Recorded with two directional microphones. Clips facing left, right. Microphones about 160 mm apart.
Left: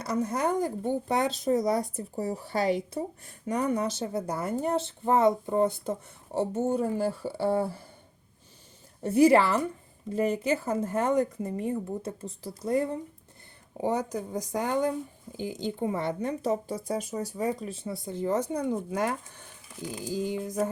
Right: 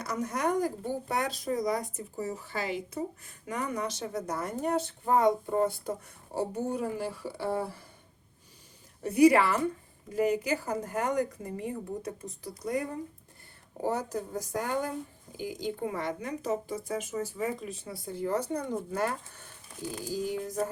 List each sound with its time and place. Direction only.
0.0 s speech: 30° left (ahead or behind)
9.0 s speech: 30° left (ahead or behind)
13.8 s speech: 15° left (ahead or behind)